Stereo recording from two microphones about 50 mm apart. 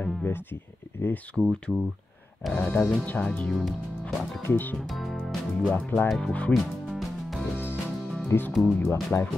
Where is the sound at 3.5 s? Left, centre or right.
Centre.